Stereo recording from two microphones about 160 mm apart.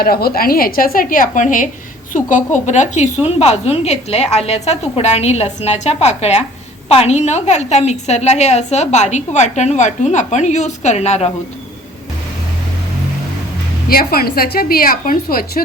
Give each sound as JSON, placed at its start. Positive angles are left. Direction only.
{"t": 0.0, "sound": "a woman's voice", "side_deg": 70}
{"t": 13.9, "sound": "a woman's voice", "side_deg": 70}